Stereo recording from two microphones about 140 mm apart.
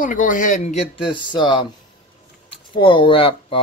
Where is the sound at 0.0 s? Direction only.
70° left (ahead or behind).